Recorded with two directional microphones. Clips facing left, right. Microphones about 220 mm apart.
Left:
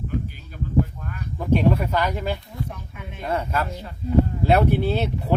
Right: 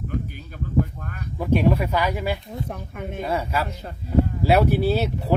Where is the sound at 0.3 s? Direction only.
50° right (ahead or behind).